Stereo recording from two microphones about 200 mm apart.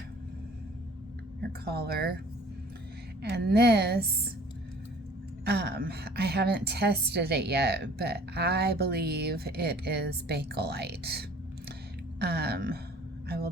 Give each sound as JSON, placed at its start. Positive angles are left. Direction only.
{"t": 1.4, "sound": "a woman's voice", "side_deg": -50}
{"t": 3.2, "sound": "a woman's voice", "side_deg": -55}
{"t": 5.5, "sound": "a woman's voice", "side_deg": -50}
{"t": 12.2, "sound": "a sound", "side_deg": -55}
{"t": 13.2, "sound": "vehicle", "side_deg": -50}